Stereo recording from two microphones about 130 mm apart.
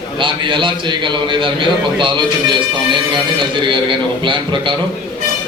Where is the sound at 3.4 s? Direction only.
40° right (ahead or behind).